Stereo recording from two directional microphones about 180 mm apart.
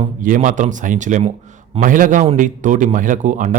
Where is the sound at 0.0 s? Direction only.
45° right (ahead or behind).